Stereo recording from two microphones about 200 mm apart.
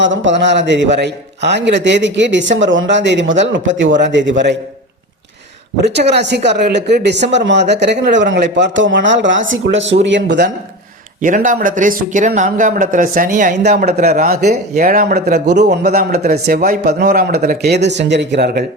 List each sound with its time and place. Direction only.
0.0 s speech: 65° right (ahead or behind)
5.8 s speech: 60° right (ahead or behind)
11.2 s speech: 40° right (ahead or behind)
13.6 s speech: 55° right (ahead or behind)
14.1 s speech: 35° right (ahead or behind); by 18.6 s 55° right (ahead or behind)